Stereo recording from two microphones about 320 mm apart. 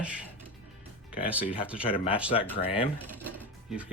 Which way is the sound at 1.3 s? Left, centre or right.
Centre.